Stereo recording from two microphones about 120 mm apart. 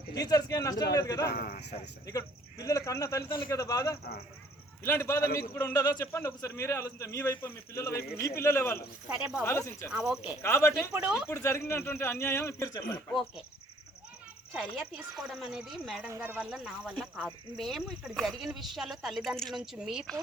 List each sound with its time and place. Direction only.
0.1 s a man's voice: 30° left (ahead or behind)
9.0 s speech: 10° right (ahead or behind)
9.4 s a man's voice: 20° left (ahead or behind)
9.9 s speech: 5° right (ahead or behind)
10.4 s a man's voice: 20° left (ahead or behind)
10.9 s speech: 10° right (ahead or behind)
11.3 s a man's voice: 20° left (ahead or behind)
13.1 s speech: centre (ahead or behind)
14.5 s speech: 5° right (ahead or behind)
16.0 s speech: 20° right (ahead or behind)